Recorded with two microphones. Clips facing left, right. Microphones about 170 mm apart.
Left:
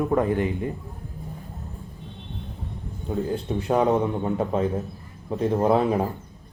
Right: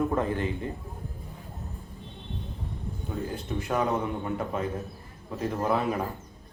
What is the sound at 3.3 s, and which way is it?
A man's voice, 30° left (ahead or behind).